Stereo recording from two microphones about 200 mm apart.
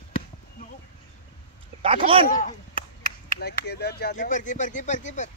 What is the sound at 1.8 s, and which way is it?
Speech, 25° right (ahead or behind).